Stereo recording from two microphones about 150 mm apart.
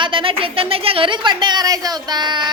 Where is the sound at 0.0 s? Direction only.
35° right (ahead or behind).